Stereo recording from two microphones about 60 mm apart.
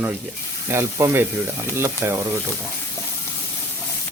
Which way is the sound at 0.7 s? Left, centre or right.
Right.